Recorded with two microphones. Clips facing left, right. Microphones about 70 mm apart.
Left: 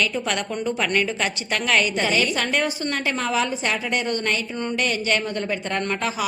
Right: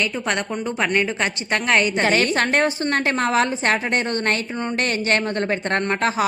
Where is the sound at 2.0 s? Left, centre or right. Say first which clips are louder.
Right 4 dB; right.